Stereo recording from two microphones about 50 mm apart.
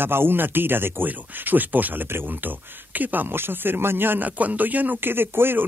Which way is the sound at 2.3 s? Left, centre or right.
Right.